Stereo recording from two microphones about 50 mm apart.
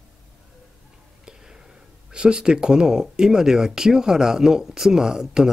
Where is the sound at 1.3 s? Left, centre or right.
Centre.